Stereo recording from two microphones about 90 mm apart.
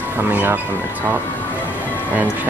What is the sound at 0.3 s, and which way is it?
Speech, 20° right (ahead or behind).